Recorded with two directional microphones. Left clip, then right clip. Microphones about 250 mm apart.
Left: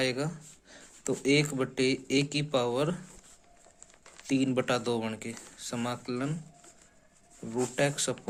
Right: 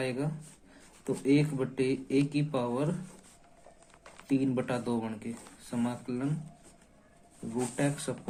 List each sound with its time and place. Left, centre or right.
0.0 s speech: left
4.3 s speech: left
7.8 s speech: left